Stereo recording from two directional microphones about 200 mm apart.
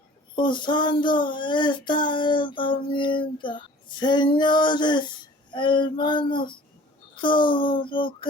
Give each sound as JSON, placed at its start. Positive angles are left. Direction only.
{"t": 0.3, "sound": "child singing", "side_deg": 25}